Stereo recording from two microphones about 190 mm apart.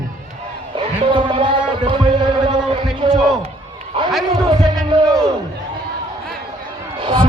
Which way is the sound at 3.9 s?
30° right (ahead or behind).